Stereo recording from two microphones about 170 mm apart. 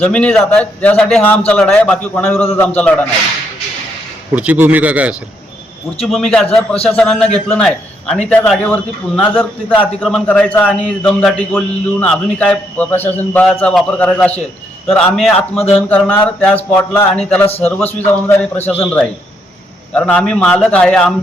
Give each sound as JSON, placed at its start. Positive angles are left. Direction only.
{"t": 0.0, "sound": "a man's voice", "side_deg": 5}
{"t": 4.4, "sound": "speech", "side_deg": -10}
{"t": 6.1, "sound": "a man's voice", "side_deg": 5}